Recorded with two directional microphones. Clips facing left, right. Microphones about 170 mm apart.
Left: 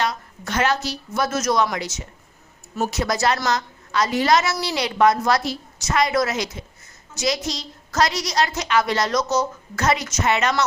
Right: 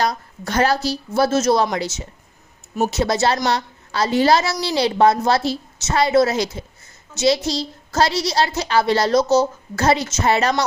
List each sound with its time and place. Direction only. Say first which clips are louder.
0.0 s a woman's voice: right 3 dB; 35° right (ahead or behind)